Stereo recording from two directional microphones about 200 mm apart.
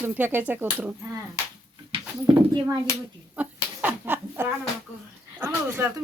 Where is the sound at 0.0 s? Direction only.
10° right (ahead or behind).